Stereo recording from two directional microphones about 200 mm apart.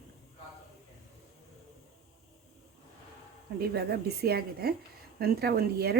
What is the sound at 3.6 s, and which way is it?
A woman's voice, 50° right (ahead or behind).